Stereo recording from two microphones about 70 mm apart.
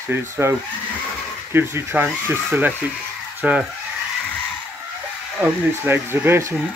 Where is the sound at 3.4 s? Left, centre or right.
Centre.